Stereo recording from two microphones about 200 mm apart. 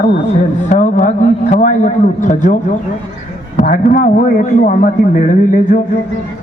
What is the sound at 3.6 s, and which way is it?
A man's voice, 45° left (ahead or behind).